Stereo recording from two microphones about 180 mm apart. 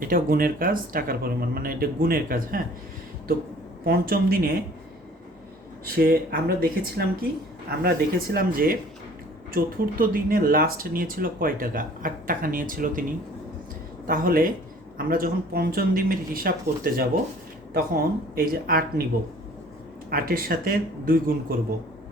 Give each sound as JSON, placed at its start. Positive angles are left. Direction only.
{"t": 0.1, "sound": "speech", "side_deg": -55}
{"t": 3.8, "sound": "speech", "side_deg": -55}
{"t": 5.8, "sound": "speech", "side_deg": -55}
{"t": 20.1, "sound": "speech", "side_deg": -55}